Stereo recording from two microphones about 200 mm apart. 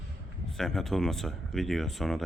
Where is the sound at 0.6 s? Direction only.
Centre (ahead or behind).